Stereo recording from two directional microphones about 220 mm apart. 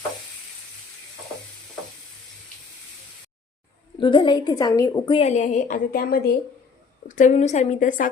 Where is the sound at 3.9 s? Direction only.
20° left (ahead or behind).